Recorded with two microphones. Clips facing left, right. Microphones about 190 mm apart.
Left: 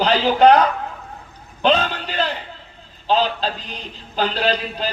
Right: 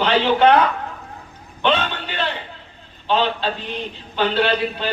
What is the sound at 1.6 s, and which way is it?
A man's voice, 35° left (ahead or behind).